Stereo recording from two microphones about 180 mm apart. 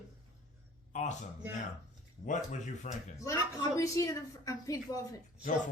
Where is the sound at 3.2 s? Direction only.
20° left (ahead or behind).